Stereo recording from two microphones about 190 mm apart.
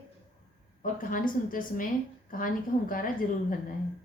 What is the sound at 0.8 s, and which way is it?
A woman's voice, 45° left (ahead or behind).